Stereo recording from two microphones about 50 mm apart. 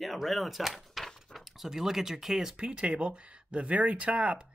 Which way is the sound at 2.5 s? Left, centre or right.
Right.